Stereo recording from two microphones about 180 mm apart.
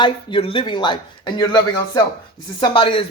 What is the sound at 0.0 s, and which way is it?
A man's voice, 30° left (ahead or behind).